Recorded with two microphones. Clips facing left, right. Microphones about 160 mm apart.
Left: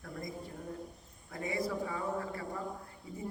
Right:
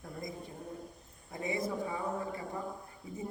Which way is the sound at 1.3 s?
20° right (ahead or behind).